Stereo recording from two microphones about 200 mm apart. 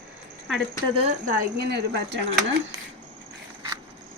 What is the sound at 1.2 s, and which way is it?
Speech, 55° right (ahead or behind).